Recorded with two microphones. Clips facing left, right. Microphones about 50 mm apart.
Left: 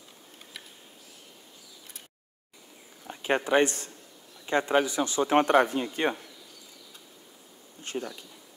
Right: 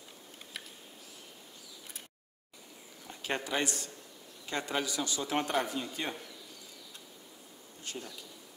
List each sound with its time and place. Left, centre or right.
3.1 s a man's voice: left
7.8 s speech: left